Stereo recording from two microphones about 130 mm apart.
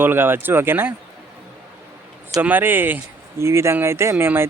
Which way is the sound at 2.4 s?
15° right (ahead or behind).